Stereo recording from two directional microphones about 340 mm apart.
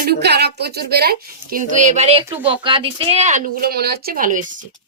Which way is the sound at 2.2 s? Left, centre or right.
Centre.